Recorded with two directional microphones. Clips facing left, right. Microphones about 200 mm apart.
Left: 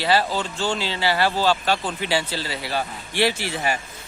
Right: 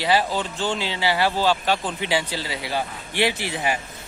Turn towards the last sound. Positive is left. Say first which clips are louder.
# left 1 dB
turn(degrees=-15)  # may be behind; listen again after turning